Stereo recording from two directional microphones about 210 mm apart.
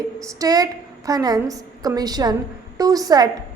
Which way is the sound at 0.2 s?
15° right (ahead or behind).